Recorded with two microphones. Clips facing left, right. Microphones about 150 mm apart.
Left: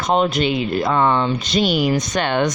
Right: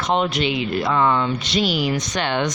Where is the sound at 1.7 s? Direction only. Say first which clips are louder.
Left 4 dB; 50° left (ahead or behind).